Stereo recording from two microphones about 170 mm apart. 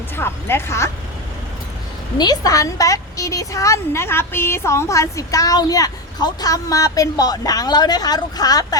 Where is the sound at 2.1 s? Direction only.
25° left (ahead or behind).